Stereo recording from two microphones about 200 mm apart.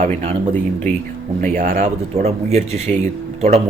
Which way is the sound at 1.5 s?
45° right (ahead or behind).